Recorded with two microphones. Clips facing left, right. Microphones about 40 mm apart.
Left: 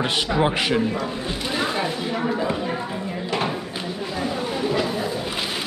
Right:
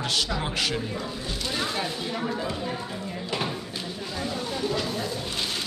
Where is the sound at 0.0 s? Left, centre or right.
Left.